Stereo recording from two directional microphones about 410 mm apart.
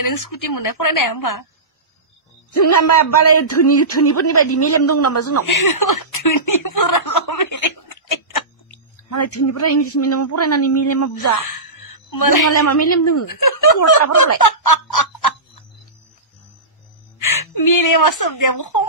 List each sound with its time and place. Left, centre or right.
0.0 s a woman's voice: left
2.5 s a man's voice: left
5.7 s speech: left
12.1 s a woman's voice: left
17.4 s a woman's voice: left